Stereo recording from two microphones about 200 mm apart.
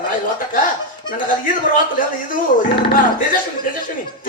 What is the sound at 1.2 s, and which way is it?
A man's voice, 40° left (ahead or behind).